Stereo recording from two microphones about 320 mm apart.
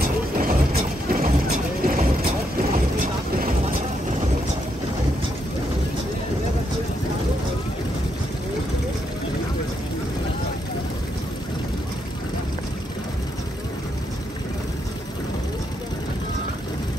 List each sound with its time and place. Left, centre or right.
0.0 s boat: right
3.0 s vehicle: right